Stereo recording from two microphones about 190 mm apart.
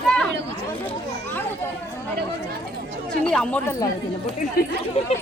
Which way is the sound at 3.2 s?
5° left (ahead or behind).